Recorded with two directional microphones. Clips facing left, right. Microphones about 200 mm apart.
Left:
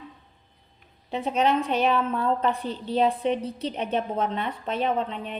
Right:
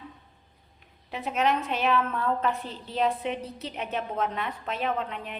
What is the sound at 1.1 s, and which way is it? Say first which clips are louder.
A woman's voice: left 3 dB; 30° left (ahead or behind).